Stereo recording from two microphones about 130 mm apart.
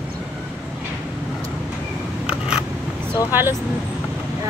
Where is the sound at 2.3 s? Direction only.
5° right (ahead or behind).